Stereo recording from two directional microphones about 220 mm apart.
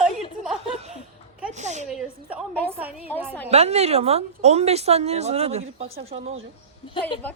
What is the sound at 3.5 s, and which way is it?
A woman's voice, 30° right (ahead or behind).